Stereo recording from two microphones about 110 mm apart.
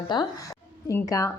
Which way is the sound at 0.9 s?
30° left (ahead or behind).